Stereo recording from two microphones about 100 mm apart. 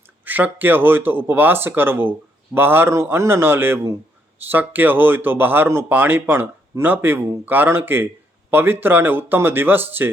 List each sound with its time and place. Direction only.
0.3 s speech: 20° right (ahead or behind)